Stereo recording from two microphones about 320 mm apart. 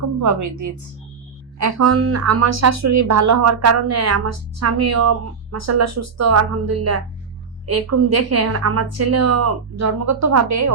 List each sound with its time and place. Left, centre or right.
0.2 s speech: right